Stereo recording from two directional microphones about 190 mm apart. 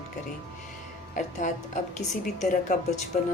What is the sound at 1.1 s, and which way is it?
Speech, 40° left (ahead or behind).